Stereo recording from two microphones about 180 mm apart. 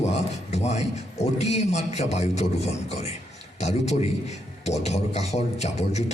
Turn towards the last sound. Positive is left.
turn(degrees=40)  # may be behind; listen again after turning